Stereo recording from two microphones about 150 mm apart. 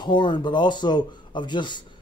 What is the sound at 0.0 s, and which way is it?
Speech, 30° left (ahead or behind).